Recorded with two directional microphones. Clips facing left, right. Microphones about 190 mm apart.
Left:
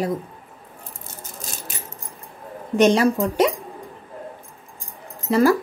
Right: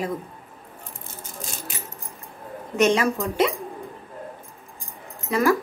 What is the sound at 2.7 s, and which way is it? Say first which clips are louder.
Speech: left 4 dB; 35° left (ahead or behind).